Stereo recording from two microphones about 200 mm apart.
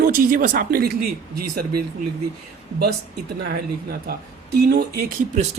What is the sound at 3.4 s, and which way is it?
A woman's voice, 50° right (ahead or behind).